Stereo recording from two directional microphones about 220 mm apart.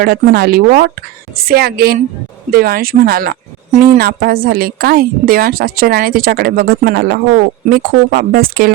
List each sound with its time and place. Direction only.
0.0 s a woman's voice: 45° right (ahead or behind)